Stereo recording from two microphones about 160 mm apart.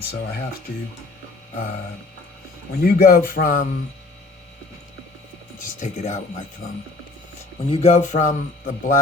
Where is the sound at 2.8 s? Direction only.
70° left (ahead or behind).